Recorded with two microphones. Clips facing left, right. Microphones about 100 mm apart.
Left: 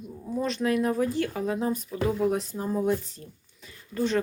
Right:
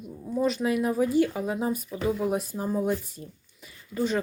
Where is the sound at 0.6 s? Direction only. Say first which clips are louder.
Even; 10° right (ahead or behind).